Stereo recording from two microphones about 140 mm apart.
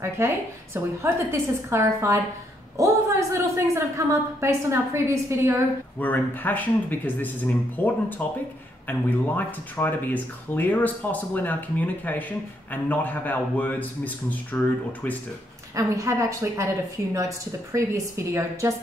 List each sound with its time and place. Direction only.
0.2 s a woman's voice: 20° right (ahead or behind)
5.9 s speech: 10° left (ahead or behind)
15.7 s a woman's voice: 20° right (ahead or behind)